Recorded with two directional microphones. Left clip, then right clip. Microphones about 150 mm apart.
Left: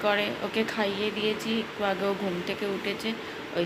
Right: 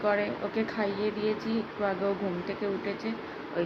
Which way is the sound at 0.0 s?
5° left (ahead or behind).